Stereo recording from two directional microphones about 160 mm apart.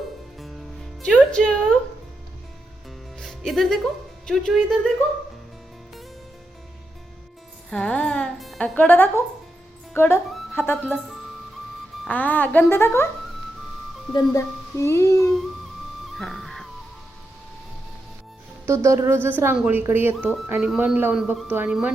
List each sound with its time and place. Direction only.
0.3 s music: centre (ahead or behind)
3.2 s speech: 5° left (ahead or behind)
7.7 s speech: 10° left (ahead or behind)
12.0 s speech: 10° left (ahead or behind)
14.1 s a child's voice: 20° left (ahead or behind)
16.1 s music: centre (ahead or behind)
18.6 s speech: 15° right (ahead or behind)